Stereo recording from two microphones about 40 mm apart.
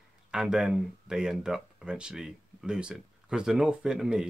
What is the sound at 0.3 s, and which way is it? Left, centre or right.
Speech, centre.